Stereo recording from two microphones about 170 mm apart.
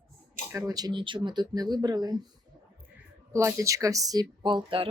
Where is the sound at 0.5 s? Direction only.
20° right (ahead or behind).